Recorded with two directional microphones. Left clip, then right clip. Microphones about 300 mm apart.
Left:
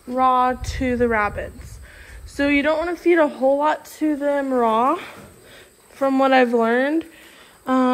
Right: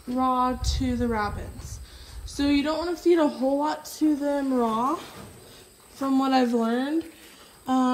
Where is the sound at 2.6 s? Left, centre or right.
Centre.